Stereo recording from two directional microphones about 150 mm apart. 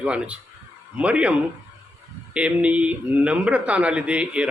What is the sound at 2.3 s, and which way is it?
A man's voice, 10° right (ahead or behind).